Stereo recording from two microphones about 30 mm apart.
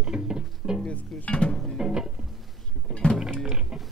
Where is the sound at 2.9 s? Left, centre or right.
Left.